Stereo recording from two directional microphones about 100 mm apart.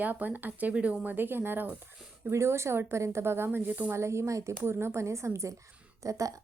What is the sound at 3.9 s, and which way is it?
Speech, 30° right (ahead or behind).